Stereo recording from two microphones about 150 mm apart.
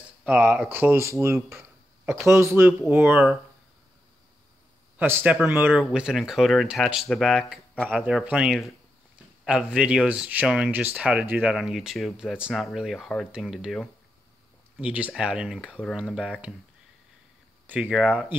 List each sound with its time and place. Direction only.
0.2 s speech: 10° right (ahead or behind)
4.9 s speech: 10° right (ahead or behind); by 8.0 s 5° left (ahead or behind)
8.0 s speech: 5° right (ahead or behind)
17.8 s speech: 5° right (ahead or behind)